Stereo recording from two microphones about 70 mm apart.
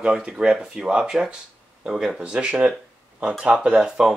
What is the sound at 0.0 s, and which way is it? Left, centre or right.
Speech, centre.